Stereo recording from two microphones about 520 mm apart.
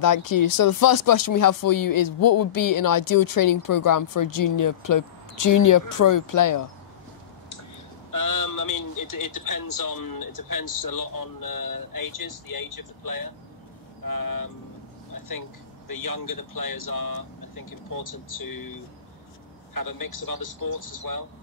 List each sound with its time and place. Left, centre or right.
0.0 s speech: left
8.1 s speech: left
15.9 s speech: left